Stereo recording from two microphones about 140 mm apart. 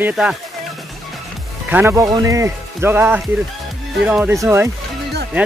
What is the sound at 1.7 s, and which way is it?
Speech, 15° right (ahead or behind).